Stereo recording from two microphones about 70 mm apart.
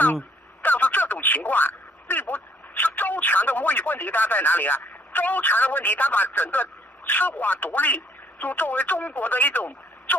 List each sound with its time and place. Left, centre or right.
0.0 s speech: left